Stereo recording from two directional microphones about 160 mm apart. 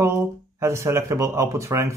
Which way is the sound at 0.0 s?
15° right (ahead or behind).